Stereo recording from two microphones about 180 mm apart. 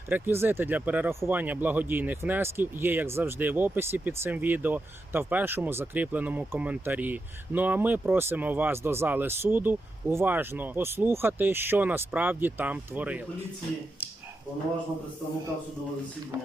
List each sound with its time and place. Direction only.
0.1 s speech: 10° right (ahead or behind)
16.3 s speech: 15° right (ahead or behind)